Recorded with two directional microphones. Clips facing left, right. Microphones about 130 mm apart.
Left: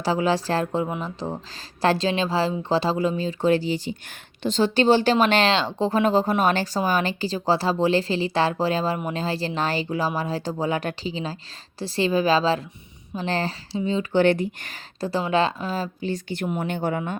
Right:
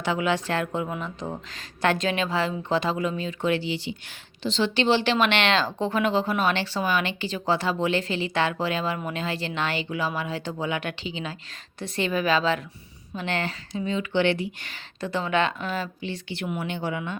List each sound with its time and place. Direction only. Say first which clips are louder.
0.0 s speech: left 3 dB; 35° left (ahead or behind)